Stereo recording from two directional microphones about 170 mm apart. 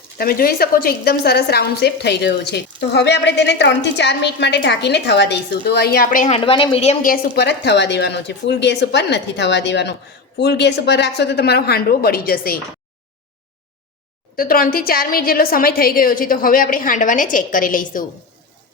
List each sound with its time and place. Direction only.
0.2 s a woman's voice: 60° left (ahead or behind)
6.2 s speech: 35° left (ahead or behind)
7.0 s a woman's voice: 65° left (ahead or behind)
14.3 s a woman's voice: 60° left (ahead or behind)